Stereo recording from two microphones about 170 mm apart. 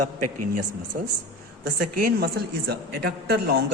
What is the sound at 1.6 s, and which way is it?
A woman's voice, 55° right (ahead or behind).